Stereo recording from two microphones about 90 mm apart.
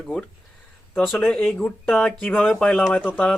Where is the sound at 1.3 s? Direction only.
10° left (ahead or behind).